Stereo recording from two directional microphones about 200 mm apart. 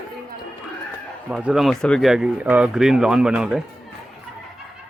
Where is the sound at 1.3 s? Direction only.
5° right (ahead or behind).